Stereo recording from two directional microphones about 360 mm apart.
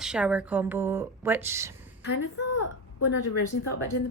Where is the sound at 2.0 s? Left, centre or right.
Left.